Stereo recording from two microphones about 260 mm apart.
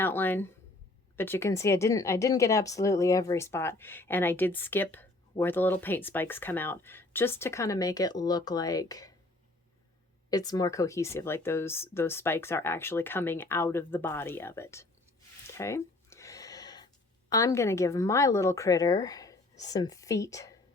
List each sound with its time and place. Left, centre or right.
0.0 s speech: centre
10.2 s speech: centre
15.5 s a sound: centre
19.7 s speech: centre